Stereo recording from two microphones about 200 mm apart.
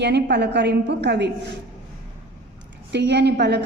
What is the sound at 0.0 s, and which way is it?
A woman's voice, 60° right (ahead or behind).